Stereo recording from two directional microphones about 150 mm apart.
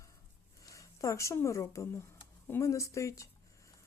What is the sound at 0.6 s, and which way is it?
Speech, 20° left (ahead or behind).